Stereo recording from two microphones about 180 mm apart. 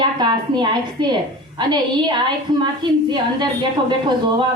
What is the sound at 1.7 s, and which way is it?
Speech, 25° right (ahead or behind).